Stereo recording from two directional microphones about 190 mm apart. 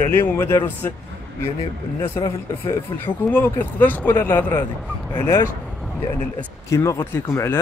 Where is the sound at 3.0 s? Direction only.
10° left (ahead or behind).